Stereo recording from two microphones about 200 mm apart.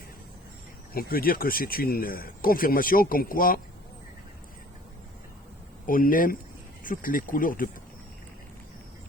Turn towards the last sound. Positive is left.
turn(degrees=45)  # may be behind; listen again after turning